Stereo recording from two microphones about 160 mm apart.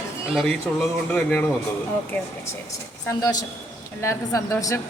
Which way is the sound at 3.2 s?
25° left (ahead or behind).